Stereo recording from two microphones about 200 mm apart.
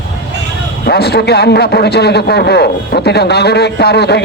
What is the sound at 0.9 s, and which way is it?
A man's voice, 55° left (ahead or behind).